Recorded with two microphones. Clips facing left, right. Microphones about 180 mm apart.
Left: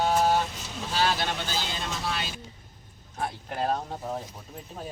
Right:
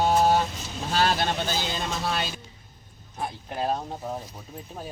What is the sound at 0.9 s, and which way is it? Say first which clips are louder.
Vehicle: right 3 dB; 50° right (ahead or behind).